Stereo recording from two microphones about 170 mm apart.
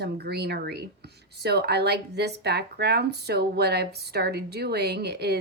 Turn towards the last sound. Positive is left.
turn(degrees=-75)  # may be behind; listen again after turning